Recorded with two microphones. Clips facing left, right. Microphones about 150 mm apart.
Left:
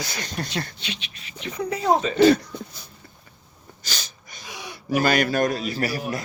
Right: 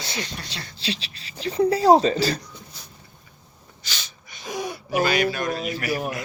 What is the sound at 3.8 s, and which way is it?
Sneeze, 40° left (ahead or behind).